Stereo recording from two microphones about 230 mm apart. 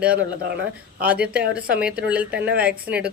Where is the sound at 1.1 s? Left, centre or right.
Centre.